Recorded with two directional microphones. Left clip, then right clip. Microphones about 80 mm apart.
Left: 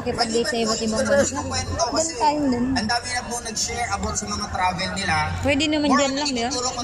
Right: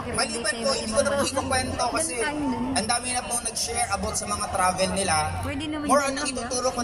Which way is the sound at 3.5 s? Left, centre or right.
Centre.